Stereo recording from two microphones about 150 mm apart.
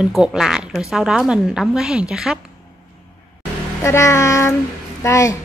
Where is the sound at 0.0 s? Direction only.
5° right (ahead or behind).